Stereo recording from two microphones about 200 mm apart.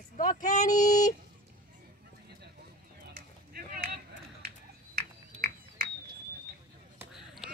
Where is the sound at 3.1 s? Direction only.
45° right (ahead or behind).